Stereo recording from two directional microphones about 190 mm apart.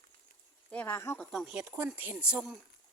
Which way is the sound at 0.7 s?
10° left (ahead or behind).